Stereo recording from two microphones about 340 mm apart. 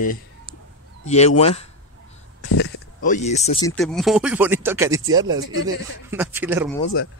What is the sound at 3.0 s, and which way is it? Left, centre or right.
Speech, left.